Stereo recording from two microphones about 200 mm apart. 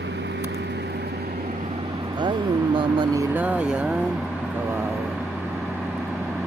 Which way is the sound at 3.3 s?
5° right (ahead or behind).